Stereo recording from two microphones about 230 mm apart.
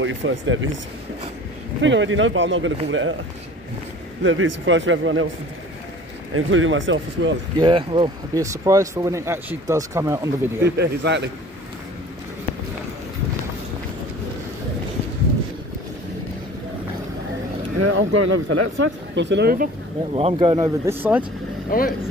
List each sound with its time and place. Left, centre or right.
0.0 s speech: right
1.8 s speech: right
4.2 s speech: right
6.3 s speech: right
7.5 s speech: centre
10.8 s speech: right
17.7 s speech: right
19.1 s speech: right
20.2 s speech: right
21.6 s speech: left